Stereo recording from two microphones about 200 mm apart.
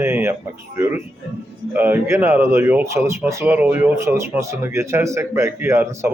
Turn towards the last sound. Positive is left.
turn(degrees=-15)  # may be behind; listen again after turning